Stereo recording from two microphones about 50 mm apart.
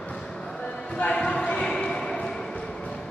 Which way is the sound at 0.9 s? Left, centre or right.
Left.